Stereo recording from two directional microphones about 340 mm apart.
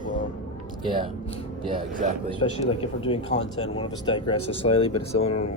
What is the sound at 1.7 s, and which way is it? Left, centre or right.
Speech, right.